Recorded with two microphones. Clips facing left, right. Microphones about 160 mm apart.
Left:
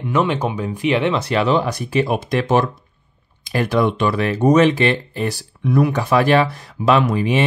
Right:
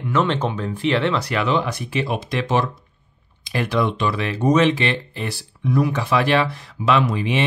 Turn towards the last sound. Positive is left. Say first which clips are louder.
# left 3 dB
turn(degrees=45)  # may be behind; listen again after turning